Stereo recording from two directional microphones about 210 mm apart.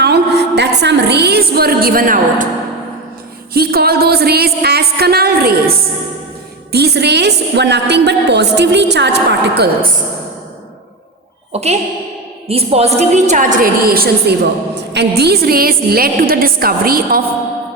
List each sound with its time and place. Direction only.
0.0 s a woman's voice: 50° right (ahead or behind)
3.5 s a woman's voice: 45° right (ahead or behind)
11.5 s a woman's voice: 30° right (ahead or behind)